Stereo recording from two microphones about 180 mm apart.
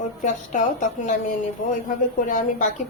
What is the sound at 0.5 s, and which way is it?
A woman's voice, 45° left (ahead or behind).